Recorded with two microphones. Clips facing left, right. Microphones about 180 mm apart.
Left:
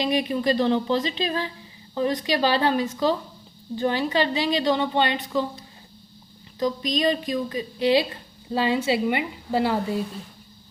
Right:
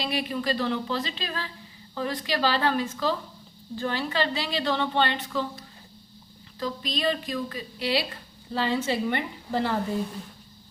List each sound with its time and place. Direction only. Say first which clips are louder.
0.0 s a woman's voice: left 6 dB; 20° left (ahead or behind)
6.6 s a woman's voice: left 6 dB; 15° left (ahead or behind)